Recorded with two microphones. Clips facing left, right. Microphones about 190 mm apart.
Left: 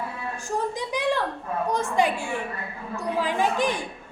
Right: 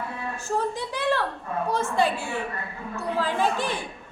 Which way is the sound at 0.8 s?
15° left (ahead or behind).